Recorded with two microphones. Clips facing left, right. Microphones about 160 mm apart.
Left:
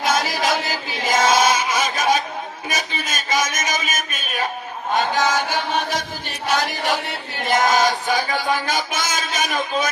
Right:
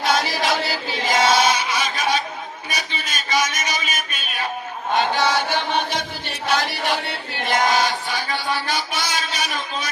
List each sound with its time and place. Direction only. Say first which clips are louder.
0.0 s chant: even; 45° left (ahead or behind)
2.6 s a sound: left 3 dB; 45° left (ahead or behind)
4.9 s chant: even; 45° left (ahead or behind)